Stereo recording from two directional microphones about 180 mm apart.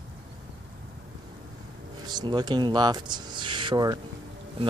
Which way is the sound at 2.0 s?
25° right (ahead or behind).